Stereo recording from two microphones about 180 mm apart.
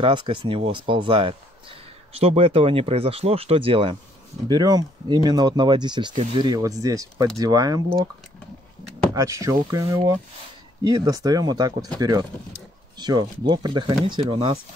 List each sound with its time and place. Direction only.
0.0 s speech: 25° right (ahead or behind)
9.1 s speech: 20° right (ahead or behind)